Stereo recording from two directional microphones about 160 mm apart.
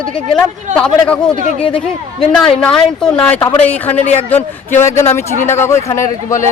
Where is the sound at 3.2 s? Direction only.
10° left (ahead or behind).